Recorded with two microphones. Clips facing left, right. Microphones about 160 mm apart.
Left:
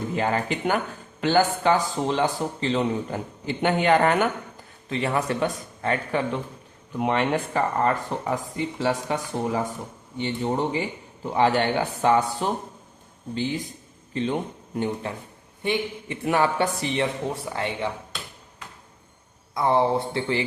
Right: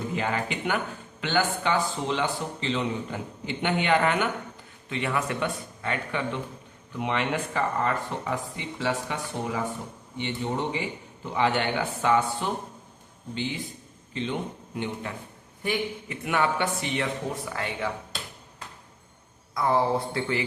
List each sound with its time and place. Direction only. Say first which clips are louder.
0.2 s a man's voice: left 6 dB; 40° left (ahead or behind)
14.1 s a man's voice: left 5 dB; 40° left (ahead or behind)
15.1 s a man's voice: left 4 dB; 30° left (ahead or behind)
16.2 s a man's voice: left 4 dB; 35° left (ahead or behind)
19.5 s speech: left 3 dB; 25° left (ahead or behind)